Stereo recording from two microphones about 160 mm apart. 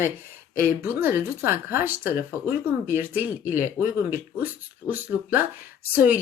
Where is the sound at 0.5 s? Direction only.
15° right (ahead or behind).